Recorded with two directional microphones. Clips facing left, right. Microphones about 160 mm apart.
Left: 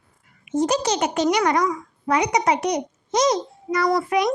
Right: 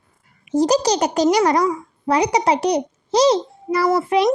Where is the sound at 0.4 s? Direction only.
35° right (ahead or behind).